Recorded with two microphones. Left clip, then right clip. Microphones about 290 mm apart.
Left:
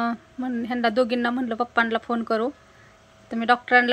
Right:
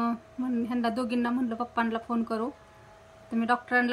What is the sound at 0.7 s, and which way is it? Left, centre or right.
A woman's voice, centre.